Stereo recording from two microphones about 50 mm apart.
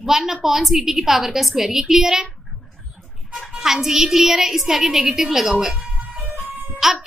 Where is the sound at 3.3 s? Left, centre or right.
Centre.